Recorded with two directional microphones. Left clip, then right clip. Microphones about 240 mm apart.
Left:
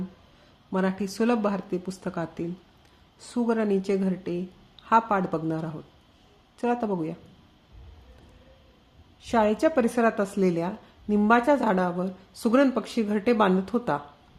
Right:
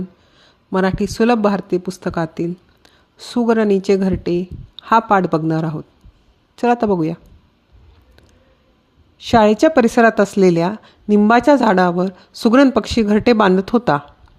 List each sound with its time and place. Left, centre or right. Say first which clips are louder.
0.7 s speech: right 10 dB; right
9.1 s speech: right 11 dB; right